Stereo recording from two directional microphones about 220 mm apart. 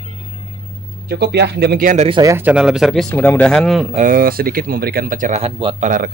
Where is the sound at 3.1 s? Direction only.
10° left (ahead or behind).